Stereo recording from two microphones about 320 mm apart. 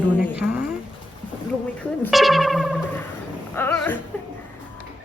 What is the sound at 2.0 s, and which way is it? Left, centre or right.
Speech, centre.